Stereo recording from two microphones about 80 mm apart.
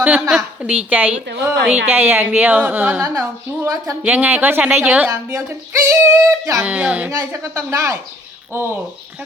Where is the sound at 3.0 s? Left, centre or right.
Right.